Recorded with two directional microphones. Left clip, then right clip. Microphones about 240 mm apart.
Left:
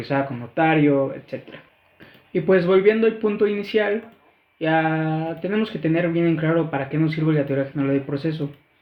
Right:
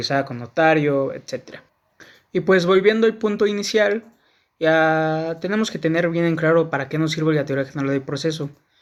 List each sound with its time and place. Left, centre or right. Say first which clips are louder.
0.0 s speech: right 2 dB; right